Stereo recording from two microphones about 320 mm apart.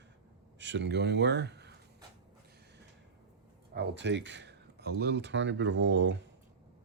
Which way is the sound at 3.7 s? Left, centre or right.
Right.